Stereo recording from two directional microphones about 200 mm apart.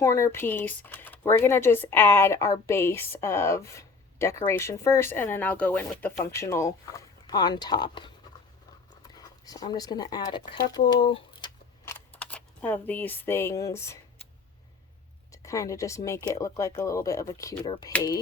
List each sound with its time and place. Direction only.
0.0 s speech: 15° left (ahead or behind)
9.1 s speech: 20° left (ahead or behind)
11.9 s speech: 5° left (ahead or behind)
15.3 s a woman's voice: 15° left (ahead or behind)